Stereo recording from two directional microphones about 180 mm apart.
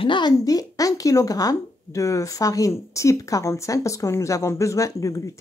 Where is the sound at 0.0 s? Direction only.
25° left (ahead or behind).